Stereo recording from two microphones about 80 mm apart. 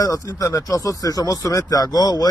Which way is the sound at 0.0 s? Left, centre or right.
Left.